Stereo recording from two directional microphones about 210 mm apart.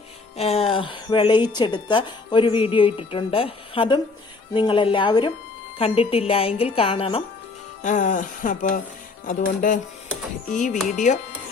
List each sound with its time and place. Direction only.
0.3 s a woman's voice: 30° left (ahead or behind)
7.8 s speech: 35° left (ahead or behind)